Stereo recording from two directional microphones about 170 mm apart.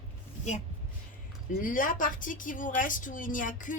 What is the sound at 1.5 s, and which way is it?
Speech, 55° left (ahead or behind).